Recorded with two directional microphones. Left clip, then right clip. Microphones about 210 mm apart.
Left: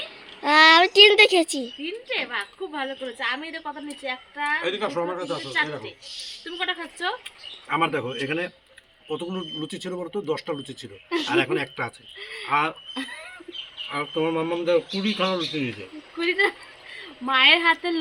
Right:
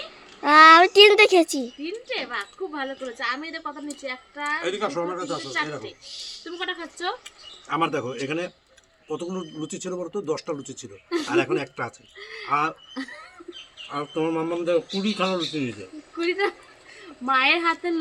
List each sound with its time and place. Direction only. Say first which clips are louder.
0.4 s babbling: right 3 dB; 10° right (ahead or behind)
1.8 s a woman's voice: left 2 dB; centre (ahead or behind)
4.6 s speech: even; 15° right (ahead or behind)
6.4 s speech: left 3 dB; 10° left (ahead or behind)
7.3 s speech: left 2 dB; 10° right (ahead or behind)
12.2 s speech: left 2 dB; 15° left (ahead or behind)
12.5 s speech: left 1 dB; 10° right (ahead or behind)
13.9 s speech: left 1 dB; 20° right (ahead or behind)
16.1 s speech: left 2 dB; 10° left (ahead or behind)